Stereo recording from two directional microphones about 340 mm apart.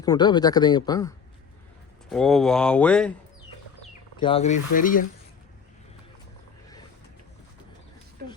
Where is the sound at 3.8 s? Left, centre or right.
Centre.